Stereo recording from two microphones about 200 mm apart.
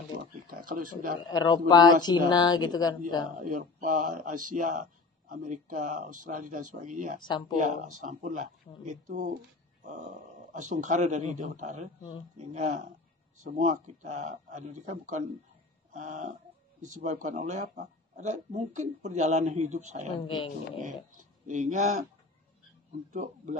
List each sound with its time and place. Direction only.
0.7 s speech: 45° right (ahead or behind)
1.3 s speech: 20° left (ahead or behind)
3.3 s speech: 45° right (ahead or behind)
7.2 s speech: 25° left (ahead or behind)
7.5 s speech: 40° right (ahead or behind)
20.1 s speech: 20° left (ahead or behind)
21.2 s speech: 40° right (ahead or behind)
23.1 s speech: 40° right (ahead or behind)